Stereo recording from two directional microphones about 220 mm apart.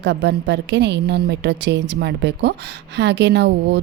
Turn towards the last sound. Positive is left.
turn(degrees=-50)  # may be behind; listen again after turning